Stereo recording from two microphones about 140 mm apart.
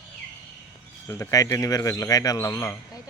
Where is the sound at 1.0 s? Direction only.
20° left (ahead or behind).